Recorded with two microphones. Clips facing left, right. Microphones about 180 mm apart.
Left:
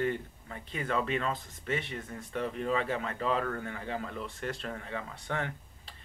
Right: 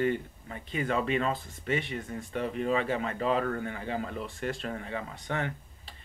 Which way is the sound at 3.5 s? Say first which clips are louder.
Right 3 dB; 15° right (ahead or behind).